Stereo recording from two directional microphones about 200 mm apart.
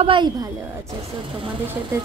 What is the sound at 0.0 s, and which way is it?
Speech, 25° right (ahead or behind).